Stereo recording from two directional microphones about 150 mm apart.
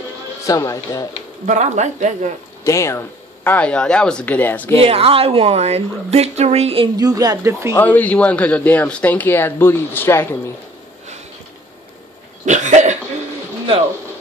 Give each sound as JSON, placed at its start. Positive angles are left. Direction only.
{"t": 0.5, "sound": "speech", "side_deg": 20}
{"t": 1.4, "sound": "speech", "side_deg": -50}
{"t": 2.6, "sound": "a man's voice", "side_deg": 20}
{"t": 4.8, "sound": "a woman's voice", "side_deg": -40}
{"t": 7.0, "sound": "a woman's voice", "side_deg": -25}
{"t": 7.7, "sound": "a man's voice", "side_deg": 10}
{"t": 12.4, "sound": "cough", "side_deg": -55}